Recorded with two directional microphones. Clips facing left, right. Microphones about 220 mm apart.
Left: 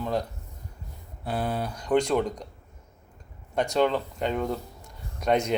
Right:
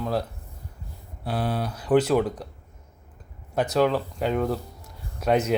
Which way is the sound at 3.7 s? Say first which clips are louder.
Right 2 dB; 5° right (ahead or behind).